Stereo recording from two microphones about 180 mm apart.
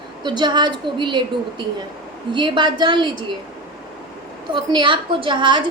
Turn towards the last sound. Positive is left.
turn(degrees=-25)  # may be behind; listen again after turning